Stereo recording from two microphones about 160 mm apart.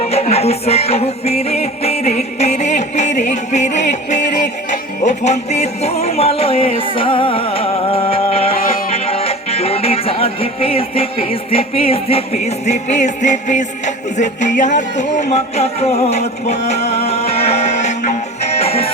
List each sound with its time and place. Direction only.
0.1 s music: 40° left (ahead or behind)